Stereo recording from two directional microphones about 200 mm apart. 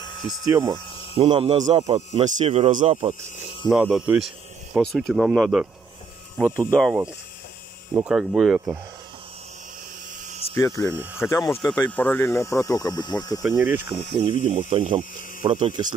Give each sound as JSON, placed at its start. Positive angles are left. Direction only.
{"t": 0.0, "sound": "a sound", "side_deg": 25}
{"t": 0.5, "sound": "speech", "side_deg": -15}
{"t": 2.0, "sound": "speech", "side_deg": -35}
{"t": 3.6, "sound": "speech", "side_deg": -5}
{"t": 6.7, "sound": "speech", "side_deg": 0}
{"t": 10.5, "sound": "speech", "side_deg": 15}
{"t": 13.4, "sound": "speech", "side_deg": -10}
{"t": 14.4, "sound": "speech", "side_deg": -30}